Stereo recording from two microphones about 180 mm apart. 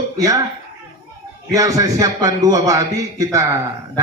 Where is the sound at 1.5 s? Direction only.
20° right (ahead or behind).